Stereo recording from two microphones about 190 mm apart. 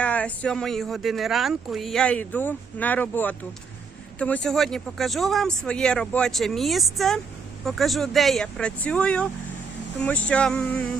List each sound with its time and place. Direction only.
0.0 s speech: 5° left (ahead or behind)